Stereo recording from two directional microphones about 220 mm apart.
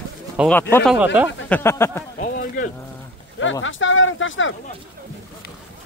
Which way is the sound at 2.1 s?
40° left (ahead or behind).